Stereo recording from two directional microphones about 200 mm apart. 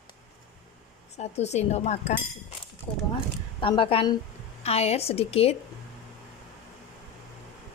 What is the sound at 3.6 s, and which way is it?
A woman's voice, 25° left (ahead or behind).